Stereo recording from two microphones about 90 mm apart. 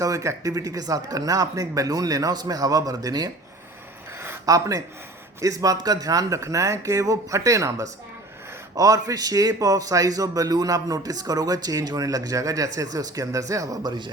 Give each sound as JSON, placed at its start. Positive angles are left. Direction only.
{"t": 0.0, "sound": "speech", "side_deg": -40}
{"t": 4.4, "sound": "a man's voice", "side_deg": -40}